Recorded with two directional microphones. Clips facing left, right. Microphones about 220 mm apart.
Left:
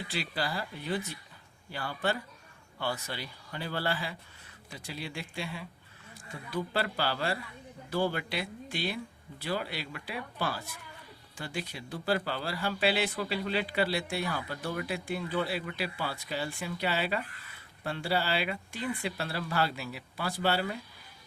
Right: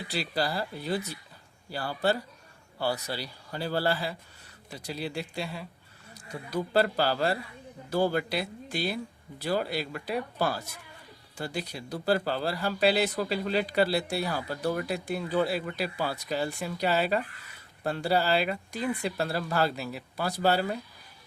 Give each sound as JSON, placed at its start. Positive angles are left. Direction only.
{"t": 0.1, "sound": "speech", "side_deg": -40}